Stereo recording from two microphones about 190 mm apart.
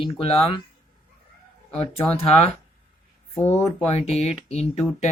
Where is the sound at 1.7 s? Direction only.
30° left (ahead or behind).